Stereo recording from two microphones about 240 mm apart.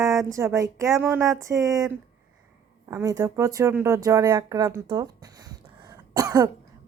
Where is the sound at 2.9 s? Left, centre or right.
Centre.